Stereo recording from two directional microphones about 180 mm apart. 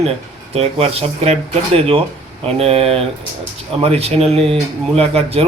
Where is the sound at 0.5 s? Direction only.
35° right (ahead or behind).